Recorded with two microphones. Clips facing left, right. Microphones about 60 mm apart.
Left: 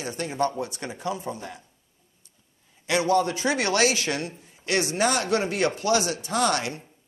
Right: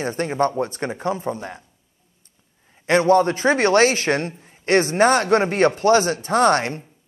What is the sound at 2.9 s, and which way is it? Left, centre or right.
A man's voice, right.